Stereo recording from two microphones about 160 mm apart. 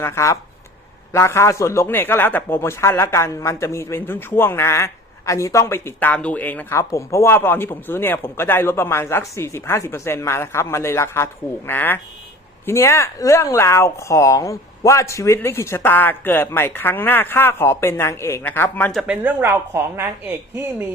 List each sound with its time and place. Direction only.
0.0 s a man's voice: 15° left (ahead or behind)
18.9 s a woman's voice: 5° right (ahead or behind)